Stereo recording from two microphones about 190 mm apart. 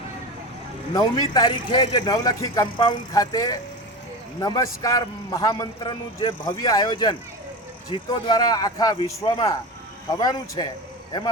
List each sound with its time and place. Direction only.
0.9 s a man's voice: 20° left (ahead or behind)